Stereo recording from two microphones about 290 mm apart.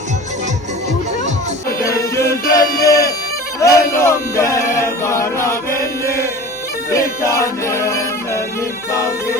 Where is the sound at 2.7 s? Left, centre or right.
Centre.